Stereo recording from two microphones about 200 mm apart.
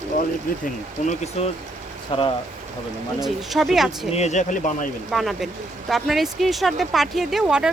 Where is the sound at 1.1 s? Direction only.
30° left (ahead or behind).